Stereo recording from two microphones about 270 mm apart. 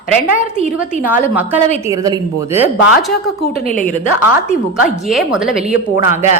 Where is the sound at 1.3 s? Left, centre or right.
Centre.